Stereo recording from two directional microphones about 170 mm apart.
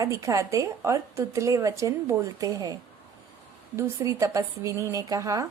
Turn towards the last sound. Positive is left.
turn(degrees=-20)  # may be behind; listen again after turning